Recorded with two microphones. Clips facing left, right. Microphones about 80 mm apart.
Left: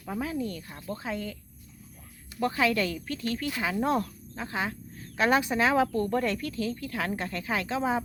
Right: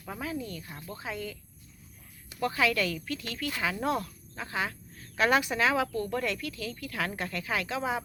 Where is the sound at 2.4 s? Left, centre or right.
Left.